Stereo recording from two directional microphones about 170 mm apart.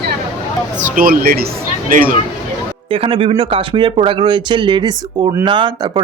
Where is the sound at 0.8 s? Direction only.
50° right (ahead or behind).